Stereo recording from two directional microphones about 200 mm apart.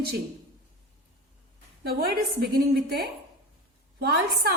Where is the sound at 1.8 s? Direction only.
50° right (ahead or behind).